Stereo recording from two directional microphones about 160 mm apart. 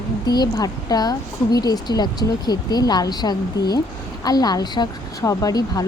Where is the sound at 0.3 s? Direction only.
25° left (ahead or behind).